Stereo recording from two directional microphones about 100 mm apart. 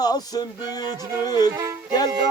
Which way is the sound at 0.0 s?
40° left (ahead or behind).